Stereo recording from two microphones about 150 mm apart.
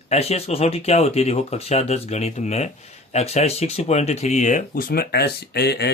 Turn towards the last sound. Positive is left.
turn(degrees=90)